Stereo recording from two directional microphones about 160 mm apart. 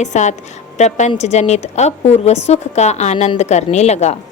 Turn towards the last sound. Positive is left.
turn(degrees=45)  # may be behind; listen again after turning